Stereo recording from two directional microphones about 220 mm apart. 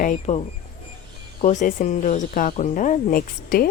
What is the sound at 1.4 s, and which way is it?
Speech, 35° left (ahead or behind).